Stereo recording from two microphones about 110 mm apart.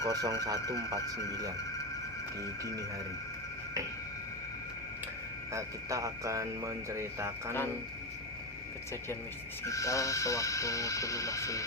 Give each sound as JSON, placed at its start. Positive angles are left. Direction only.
{"t": 0.0, "sound": "speech", "side_deg": -35}
{"t": 0.6, "sound": "speech", "side_deg": 30}
{"t": 2.4, "sound": "speech", "side_deg": 30}
{"t": 5.5, "sound": "speech", "side_deg": -30}
{"t": 9.6, "sound": "speech", "side_deg": 30}